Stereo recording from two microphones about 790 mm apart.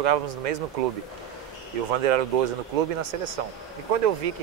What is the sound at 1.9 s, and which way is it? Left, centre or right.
Speech, right.